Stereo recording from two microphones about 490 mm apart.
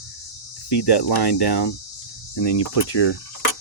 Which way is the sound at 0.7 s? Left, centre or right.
Left.